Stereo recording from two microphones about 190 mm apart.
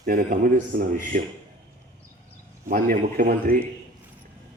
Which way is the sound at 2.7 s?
45° right (ahead or behind).